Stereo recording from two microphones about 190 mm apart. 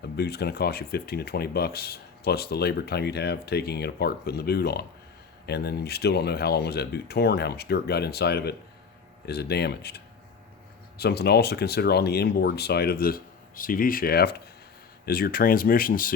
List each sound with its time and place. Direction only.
0.2 s speech: 60° left (ahead or behind)